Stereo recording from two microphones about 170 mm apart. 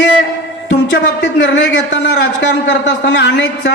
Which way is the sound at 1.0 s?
90° left.